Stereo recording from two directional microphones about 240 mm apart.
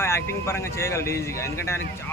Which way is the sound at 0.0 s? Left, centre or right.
Centre.